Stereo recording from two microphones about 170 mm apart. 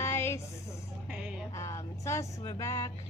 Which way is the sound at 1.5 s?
15° left (ahead or behind).